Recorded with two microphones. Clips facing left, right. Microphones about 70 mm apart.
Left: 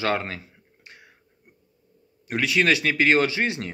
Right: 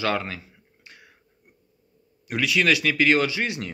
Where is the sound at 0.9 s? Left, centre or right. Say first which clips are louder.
Left 1 dB; left.